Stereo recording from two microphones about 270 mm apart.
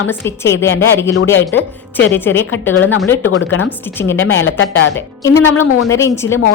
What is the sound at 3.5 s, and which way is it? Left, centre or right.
Speech, left.